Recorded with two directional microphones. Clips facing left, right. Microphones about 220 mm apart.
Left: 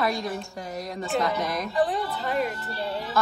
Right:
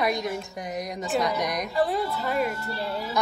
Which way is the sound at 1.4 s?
15° right (ahead or behind).